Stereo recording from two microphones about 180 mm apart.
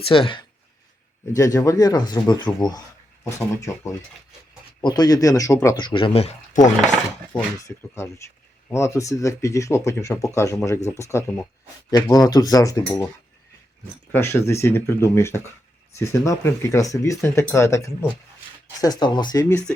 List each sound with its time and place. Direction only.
0.0 s speech: 30° left (ahead or behind)
1.4 s speech: 20° left (ahead or behind); by 6.7 s 40° left (ahead or behind)
7.9 s speech: 15° left (ahead or behind)
14.1 s speech: 15° left (ahead or behind)